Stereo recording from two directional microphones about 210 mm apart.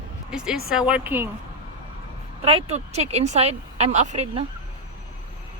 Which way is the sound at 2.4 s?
30° right (ahead or behind).